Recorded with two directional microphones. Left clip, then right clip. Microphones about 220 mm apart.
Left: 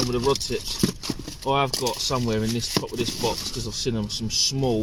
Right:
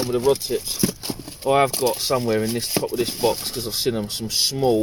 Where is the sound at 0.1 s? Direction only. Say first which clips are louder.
Right 4 dB; 10° right (ahead or behind).